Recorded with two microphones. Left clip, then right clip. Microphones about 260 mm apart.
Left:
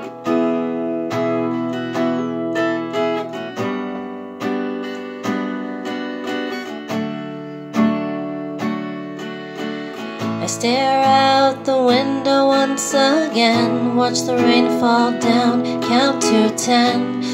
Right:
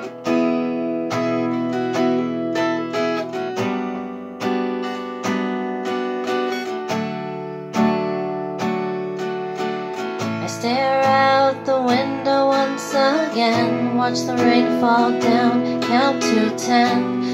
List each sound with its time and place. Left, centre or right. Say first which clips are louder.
0.3 s music: left 1 dB; centre
7.7 s music: even; centre
10.6 s music: left 2 dB; left